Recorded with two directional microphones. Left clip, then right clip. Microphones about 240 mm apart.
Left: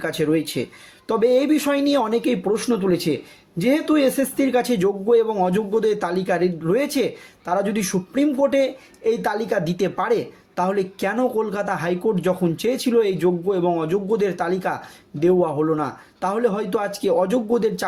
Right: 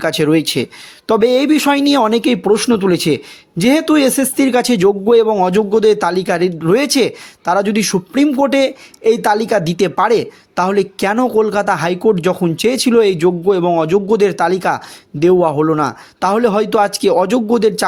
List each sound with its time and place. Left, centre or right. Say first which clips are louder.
0.0 s speech: right 8 dB; right